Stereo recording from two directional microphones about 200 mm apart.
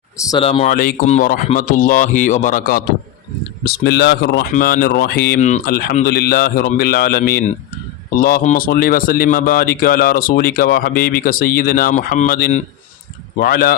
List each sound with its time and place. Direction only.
0.3 s speech: 25° left (ahead or behind)
0.7 s a man's voice: 45° left (ahead or behind)
3.6 s speech: 55° left (ahead or behind)
5.4 s speech: 35° left (ahead or behind)